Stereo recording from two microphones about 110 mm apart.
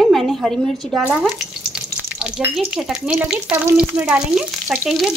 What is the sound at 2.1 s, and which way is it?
Speech, 5° right (ahead or behind).